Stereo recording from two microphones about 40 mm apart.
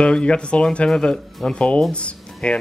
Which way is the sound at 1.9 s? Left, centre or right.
Left.